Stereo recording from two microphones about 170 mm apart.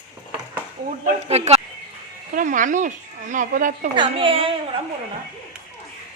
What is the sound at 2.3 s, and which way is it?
Speech, 50° right (ahead or behind).